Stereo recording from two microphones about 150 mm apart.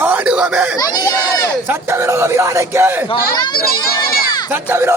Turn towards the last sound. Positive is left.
turn(degrees=-15)  # may be behind; listen again after turning